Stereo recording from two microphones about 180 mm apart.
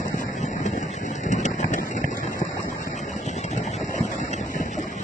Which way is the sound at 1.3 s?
40° left (ahead or behind).